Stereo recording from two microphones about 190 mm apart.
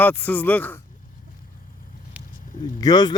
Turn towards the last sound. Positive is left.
turn(degrees=20)  # may be behind; listen again after turning